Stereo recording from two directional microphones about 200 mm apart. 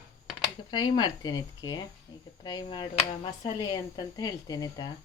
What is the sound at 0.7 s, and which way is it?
Speech, 20° left (ahead or behind).